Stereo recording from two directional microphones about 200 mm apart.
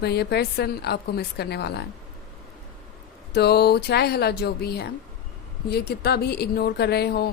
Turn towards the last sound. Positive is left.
turn(degrees=55)  # may be behind; listen again after turning